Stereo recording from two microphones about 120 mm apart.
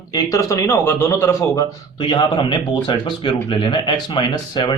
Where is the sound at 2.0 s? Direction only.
40° left (ahead or behind).